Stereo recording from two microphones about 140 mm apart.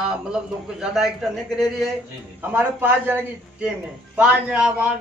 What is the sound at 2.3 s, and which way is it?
A man's voice, 10° right (ahead or behind).